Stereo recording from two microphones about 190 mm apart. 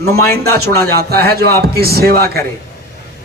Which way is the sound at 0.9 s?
55° right (ahead or behind).